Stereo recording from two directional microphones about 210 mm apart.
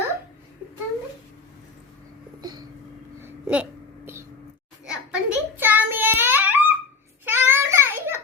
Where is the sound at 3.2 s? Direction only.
10° right (ahead or behind).